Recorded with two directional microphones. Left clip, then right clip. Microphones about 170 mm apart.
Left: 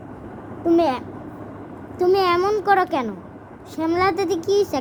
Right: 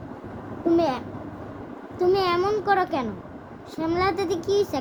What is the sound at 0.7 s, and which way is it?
A child's voice, 30° left (ahead or behind).